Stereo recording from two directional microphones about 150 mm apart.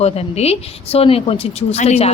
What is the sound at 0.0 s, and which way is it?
Speech, 45° left (ahead or behind).